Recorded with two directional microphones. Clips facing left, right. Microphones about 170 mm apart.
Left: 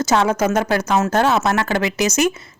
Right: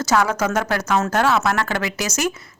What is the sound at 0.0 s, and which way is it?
A woman's voice, 20° left (ahead or behind).